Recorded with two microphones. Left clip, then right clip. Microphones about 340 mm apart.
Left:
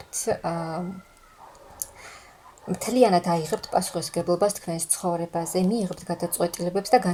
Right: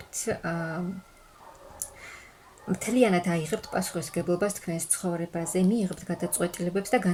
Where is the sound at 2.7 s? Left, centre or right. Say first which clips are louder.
Left 4 dB; centre.